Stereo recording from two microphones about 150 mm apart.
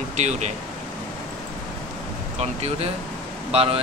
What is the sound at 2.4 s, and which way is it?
Speech, 45° right (ahead or behind).